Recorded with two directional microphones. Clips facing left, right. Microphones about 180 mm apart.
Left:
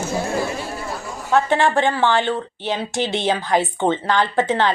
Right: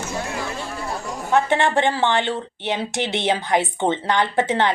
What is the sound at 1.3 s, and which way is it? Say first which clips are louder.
A woman's voice: left 1 dB; 20° right (ahead or behind).